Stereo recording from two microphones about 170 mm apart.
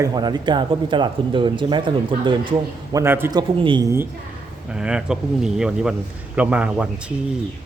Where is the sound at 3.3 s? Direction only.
25° right (ahead or behind).